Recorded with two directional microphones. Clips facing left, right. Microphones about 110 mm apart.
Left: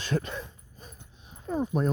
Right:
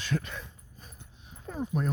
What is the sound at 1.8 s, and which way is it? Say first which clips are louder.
Speech: left 4 dB; 25° left (ahead or behind).